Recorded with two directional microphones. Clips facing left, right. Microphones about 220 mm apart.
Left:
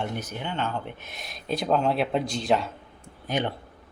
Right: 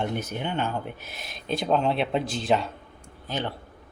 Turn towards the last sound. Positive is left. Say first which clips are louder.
# left 3 dB
turn(degrees=15)  # may be behind; listen again after turning